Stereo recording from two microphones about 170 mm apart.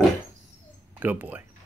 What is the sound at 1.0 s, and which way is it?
Speech, 10° right (ahead or behind).